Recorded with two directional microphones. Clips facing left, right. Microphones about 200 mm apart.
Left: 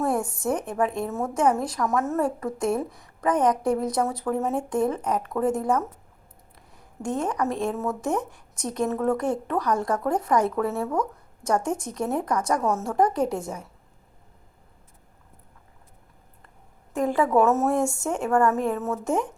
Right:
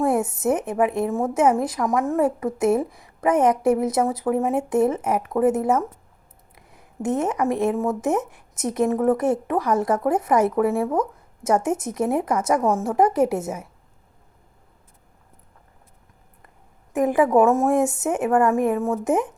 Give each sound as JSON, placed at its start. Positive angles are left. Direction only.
{"t": 0.0, "sound": "a woman's voice", "side_deg": -20}
{"t": 7.0, "sound": "a woman's voice", "side_deg": -20}
{"t": 16.9, "sound": "a woman's voice", "side_deg": -20}